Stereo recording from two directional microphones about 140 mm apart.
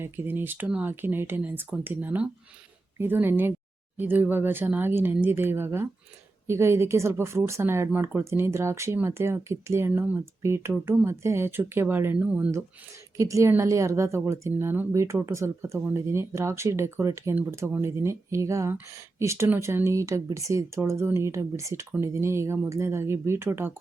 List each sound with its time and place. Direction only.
0.0 s speech: 15° right (ahead or behind)